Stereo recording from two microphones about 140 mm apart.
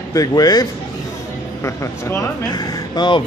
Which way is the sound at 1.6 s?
20° left (ahead or behind).